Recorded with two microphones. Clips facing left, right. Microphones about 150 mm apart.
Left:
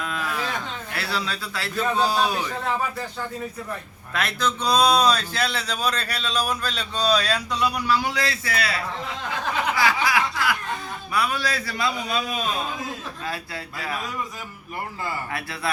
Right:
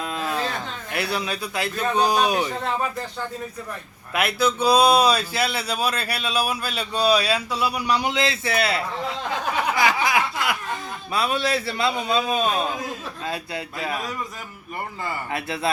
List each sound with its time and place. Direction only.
0.0 s a sound: 25° right (ahead or behind)
0.9 s speech: 20° right (ahead or behind)
4.1 s speech: 10° right (ahead or behind)
9.7 s chuckle: 20° right (ahead or behind)
11.1 s a man's voice: 25° right (ahead or behind)
15.3 s a man's voice: 25° right (ahead or behind)